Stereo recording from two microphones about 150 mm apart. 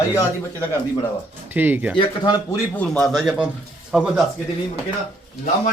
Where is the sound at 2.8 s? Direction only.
5° left (ahead or behind).